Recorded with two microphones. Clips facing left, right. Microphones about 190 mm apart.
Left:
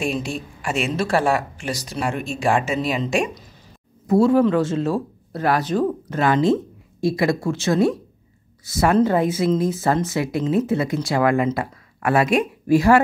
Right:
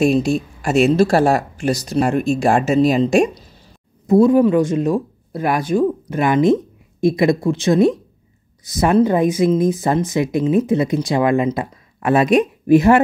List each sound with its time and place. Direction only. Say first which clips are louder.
0.0 s speech: right 9 dB; 40° right (ahead or behind)
4.1 s speech: right 4 dB; 15° right (ahead or behind)